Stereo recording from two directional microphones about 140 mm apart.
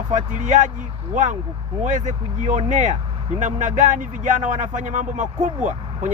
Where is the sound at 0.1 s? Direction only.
60° right (ahead or behind).